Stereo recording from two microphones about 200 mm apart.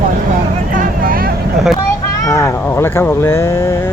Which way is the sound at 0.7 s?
45° right (ahead or behind).